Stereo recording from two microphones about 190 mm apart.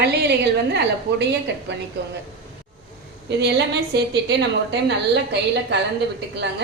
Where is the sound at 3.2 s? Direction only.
65° right (ahead or behind).